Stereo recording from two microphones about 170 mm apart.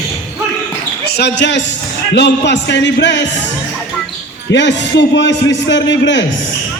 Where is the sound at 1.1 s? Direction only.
85° left.